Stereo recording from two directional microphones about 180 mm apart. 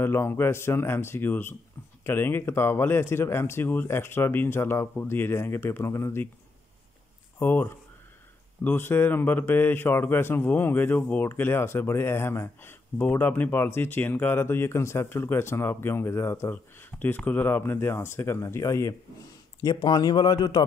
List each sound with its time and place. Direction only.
0.0 s speech: 10° left (ahead or behind)
7.3 s speech: 10° left (ahead or behind)